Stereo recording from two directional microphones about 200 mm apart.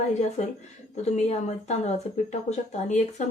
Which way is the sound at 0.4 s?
35° left (ahead or behind).